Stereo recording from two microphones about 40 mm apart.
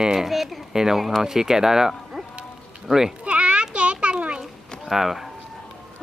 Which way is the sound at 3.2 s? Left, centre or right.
Right.